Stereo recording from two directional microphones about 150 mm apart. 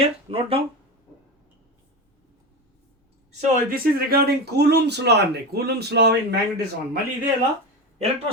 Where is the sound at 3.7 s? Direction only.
90° right.